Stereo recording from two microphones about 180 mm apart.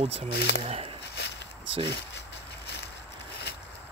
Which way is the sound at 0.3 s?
65° left (ahead or behind).